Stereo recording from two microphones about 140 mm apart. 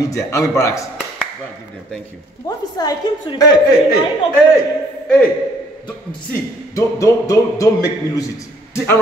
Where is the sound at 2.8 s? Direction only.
25° left (ahead or behind).